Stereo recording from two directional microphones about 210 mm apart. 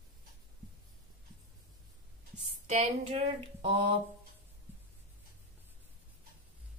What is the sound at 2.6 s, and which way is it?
Speech, 30° right (ahead or behind).